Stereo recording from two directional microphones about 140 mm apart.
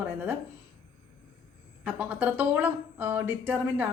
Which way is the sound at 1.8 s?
10° right (ahead or behind).